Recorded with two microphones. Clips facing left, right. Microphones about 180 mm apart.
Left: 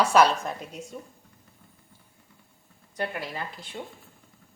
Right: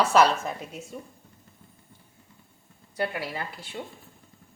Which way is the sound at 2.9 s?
10° right (ahead or behind).